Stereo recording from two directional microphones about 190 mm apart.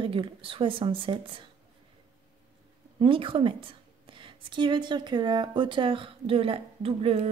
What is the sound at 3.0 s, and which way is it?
Speech, 25° right (ahead or behind).